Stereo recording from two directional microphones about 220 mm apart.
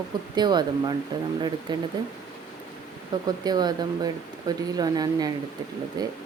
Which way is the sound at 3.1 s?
20° right (ahead or behind).